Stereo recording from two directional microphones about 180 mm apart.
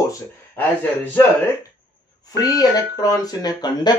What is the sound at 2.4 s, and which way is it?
Speech, 20° left (ahead or behind).